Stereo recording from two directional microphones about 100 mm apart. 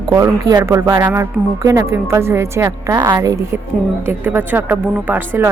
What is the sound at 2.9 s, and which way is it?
Speech, 35° right (ahead or behind).